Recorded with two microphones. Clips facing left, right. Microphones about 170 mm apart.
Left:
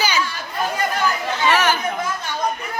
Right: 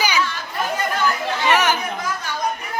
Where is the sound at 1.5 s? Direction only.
15° right (ahead or behind).